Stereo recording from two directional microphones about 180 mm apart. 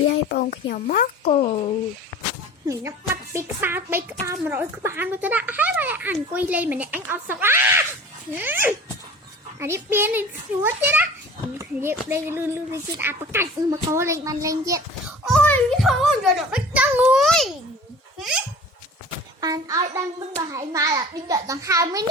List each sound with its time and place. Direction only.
0.1 s speech: 55° left (ahead or behind)
1.3 s speech: 35° left (ahead or behind)
2.6 s fowl: 15° right (ahead or behind)
15.2 s a child's voice: 5° left (ahead or behind)
19.4 s a child's voice: 20° right (ahead or behind)
20.5 s fowl: 20° right (ahead or behind)